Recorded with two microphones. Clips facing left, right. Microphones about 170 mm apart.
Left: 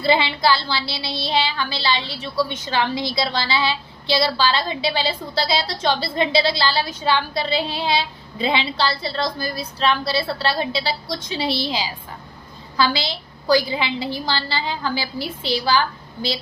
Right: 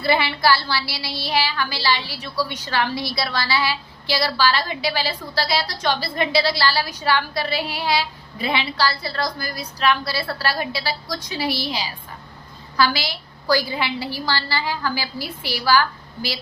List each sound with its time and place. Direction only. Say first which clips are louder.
0.0 s a woman's voice: left 1 dB; 20° left (ahead or behind)
12.7 s a woman's voice: even; 25° left (ahead or behind)